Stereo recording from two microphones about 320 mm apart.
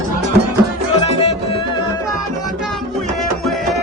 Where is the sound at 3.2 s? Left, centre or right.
Centre.